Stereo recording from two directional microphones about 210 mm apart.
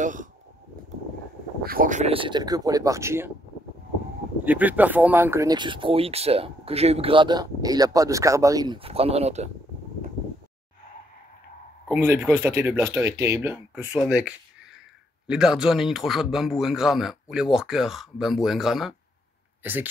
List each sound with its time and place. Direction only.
0.0 s a sound: 40° right (ahead or behind)
1.6 s speech: 45° right (ahead or behind); by 3.3 s 15° right (ahead or behind)
4.5 s speech: 10° right (ahead or behind); by 9.5 s 30° right (ahead or behind)
11.9 s a man's voice: 10° right (ahead or behind)